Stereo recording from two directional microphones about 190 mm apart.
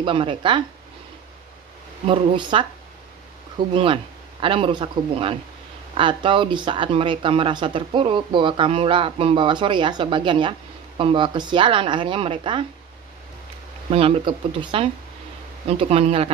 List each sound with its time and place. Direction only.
0.0 s speech: 25° right (ahead or behind)
2.0 s speech: 25° right (ahead or behind)
13.8 s speech: 30° right (ahead or behind)